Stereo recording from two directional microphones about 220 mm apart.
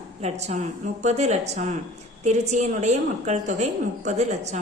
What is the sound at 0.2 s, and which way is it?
A woman's voice, 30° right (ahead or behind).